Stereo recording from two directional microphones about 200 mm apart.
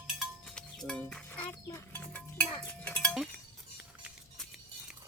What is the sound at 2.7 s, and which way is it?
Cowbell, 5° left (ahead or behind).